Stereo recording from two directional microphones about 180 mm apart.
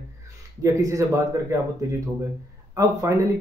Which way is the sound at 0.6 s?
15° right (ahead or behind).